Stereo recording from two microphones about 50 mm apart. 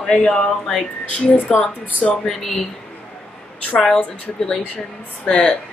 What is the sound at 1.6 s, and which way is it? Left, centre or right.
Speech, left.